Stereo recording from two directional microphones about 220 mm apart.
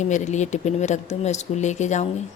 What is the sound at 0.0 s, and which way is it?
A woman's voice, 35° left (ahead or behind).